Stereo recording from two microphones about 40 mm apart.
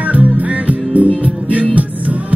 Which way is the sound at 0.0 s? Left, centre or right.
Right.